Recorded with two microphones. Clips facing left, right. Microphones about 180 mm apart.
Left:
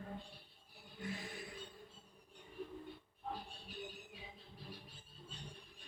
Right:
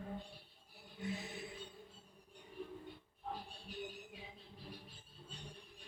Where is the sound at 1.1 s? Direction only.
20° right (ahead or behind).